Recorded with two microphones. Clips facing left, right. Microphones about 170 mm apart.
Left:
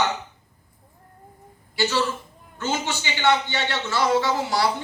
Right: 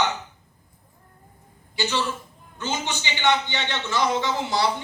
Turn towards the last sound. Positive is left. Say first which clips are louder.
# left 2 dB
turn(degrees=-20)  # may be behind; listen again after turning